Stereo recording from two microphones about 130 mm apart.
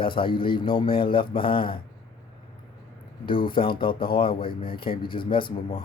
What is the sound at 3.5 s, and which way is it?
Speech, 40° left (ahead or behind).